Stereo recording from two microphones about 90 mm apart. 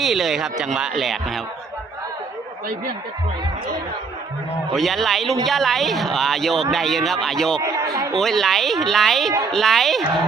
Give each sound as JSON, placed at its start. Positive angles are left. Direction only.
{"t": 0.0, "sound": "speech", "side_deg": 0}
{"t": 4.7, "sound": "speech", "side_deg": 0}
{"t": 7.6, "sound": "a man's voice", "side_deg": -35}
{"t": 8.2, "sound": "speech", "side_deg": 5}